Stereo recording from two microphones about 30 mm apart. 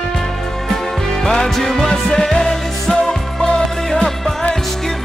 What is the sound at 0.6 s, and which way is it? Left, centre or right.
Music, centre.